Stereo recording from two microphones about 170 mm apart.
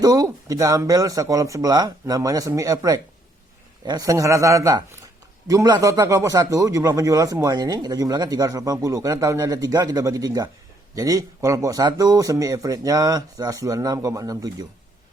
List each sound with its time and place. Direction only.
0.0 s speech: 20° right (ahead or behind)